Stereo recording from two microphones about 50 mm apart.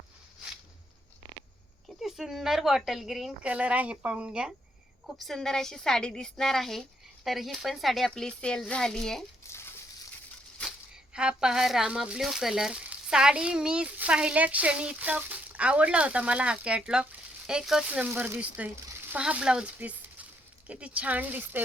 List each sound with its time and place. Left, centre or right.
2.0 s a woman's voice: centre
3.4 s speech: right
5.0 s a woman's voice: centre
8.1 s a woman's voice: centre
9.5 s a sound: left
10.7 s a sound: centre
11.9 s speech: centre
14.3 s speech: right; by 17.8 s centre
17.8 s speech: right
19.8 s a sound: right
20.7 s speech: right